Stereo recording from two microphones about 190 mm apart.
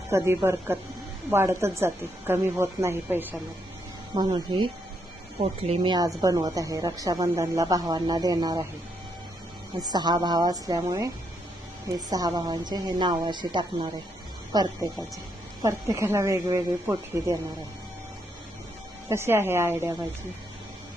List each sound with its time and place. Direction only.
0.1 s a woman's voice: 10° right (ahead or behind)
4.1 s a woman's voice: 20° right (ahead or behind)
9.9 s a woman's voice: 20° right (ahead or behind)
19.0 s a woman's voice: 15° right (ahead or behind)